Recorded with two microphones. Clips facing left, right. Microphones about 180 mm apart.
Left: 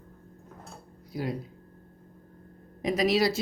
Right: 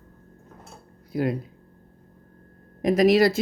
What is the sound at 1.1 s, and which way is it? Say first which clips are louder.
Speech: right 7 dB; 55° right (ahead or behind).